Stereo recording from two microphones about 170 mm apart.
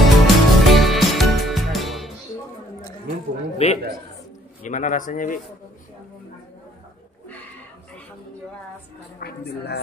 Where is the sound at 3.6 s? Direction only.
40° left (ahead or behind).